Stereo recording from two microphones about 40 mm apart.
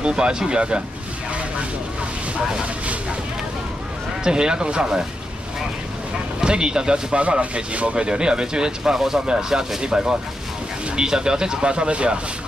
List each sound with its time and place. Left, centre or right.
0.0 s speech: right
4.2 s speech: centre
6.4 s speech: centre